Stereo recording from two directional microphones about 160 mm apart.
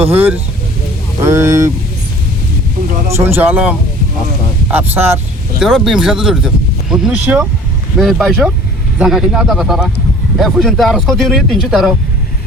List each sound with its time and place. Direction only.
0.0 s speech: 10° right (ahead or behind)
3.1 s speech: 15° right (ahead or behind)
5.6 s speech: centre (ahead or behind)